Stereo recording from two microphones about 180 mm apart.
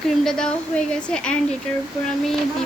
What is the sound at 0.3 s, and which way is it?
A woman's voice, 5° left (ahead or behind).